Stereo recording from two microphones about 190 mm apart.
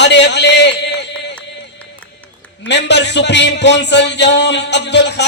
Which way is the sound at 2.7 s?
65° left (ahead or behind).